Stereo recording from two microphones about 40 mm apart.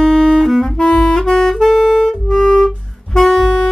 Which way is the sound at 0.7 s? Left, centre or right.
Left.